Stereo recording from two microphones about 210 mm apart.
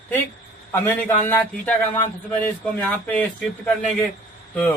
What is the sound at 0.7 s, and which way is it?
A man's voice, 10° left (ahead or behind).